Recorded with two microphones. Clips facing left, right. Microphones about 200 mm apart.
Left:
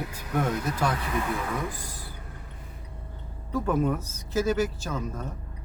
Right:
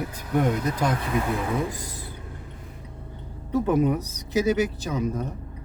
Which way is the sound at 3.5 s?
15° right (ahead or behind).